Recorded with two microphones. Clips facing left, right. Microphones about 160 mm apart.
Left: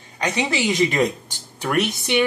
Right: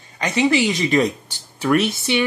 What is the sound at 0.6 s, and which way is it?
Speech, 20° left (ahead or behind).